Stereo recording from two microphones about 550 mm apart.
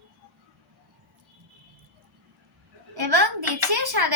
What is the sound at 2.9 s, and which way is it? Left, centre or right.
A woman's voice, right.